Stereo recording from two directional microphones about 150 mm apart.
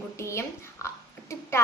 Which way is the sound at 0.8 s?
20° left (ahead or behind).